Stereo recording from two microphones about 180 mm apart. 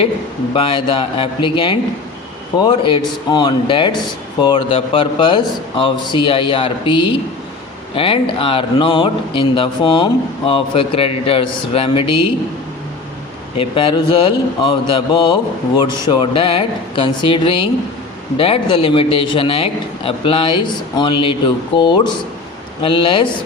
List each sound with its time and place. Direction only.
0.5 s speech: 30° left (ahead or behind)
13.6 s speech: 30° left (ahead or behind)